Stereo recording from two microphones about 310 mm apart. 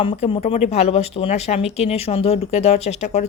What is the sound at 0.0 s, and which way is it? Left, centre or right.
A woman's voice, centre.